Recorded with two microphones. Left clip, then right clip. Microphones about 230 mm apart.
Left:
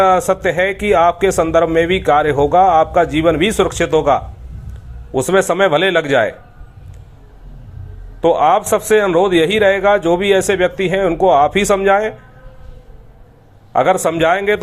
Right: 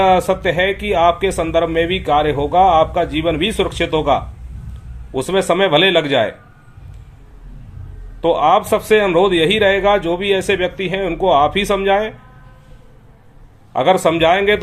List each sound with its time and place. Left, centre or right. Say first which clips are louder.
0.0 s a man's voice: left 1 dB; centre
8.2 s a man's voice: left 1 dB; centre
13.7 s a man's voice: even; centre